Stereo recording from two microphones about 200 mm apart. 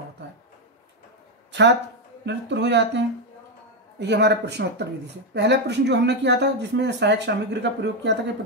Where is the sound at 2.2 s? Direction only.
60° right (ahead or behind).